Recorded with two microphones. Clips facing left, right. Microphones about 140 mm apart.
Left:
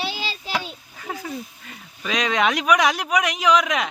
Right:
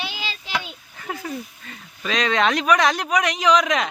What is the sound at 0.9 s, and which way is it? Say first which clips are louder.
Speech: right 1 dB; 5° left (ahead or behind).